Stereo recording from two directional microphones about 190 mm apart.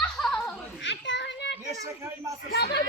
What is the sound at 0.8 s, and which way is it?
Children playing, 70° left (ahead or behind).